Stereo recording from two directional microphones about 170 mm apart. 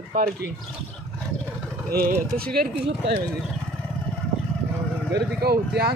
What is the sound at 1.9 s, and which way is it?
Speech, 60° right (ahead or behind).